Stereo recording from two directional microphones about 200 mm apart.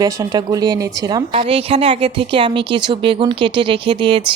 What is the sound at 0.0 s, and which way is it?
Speech, 20° right (ahead or behind).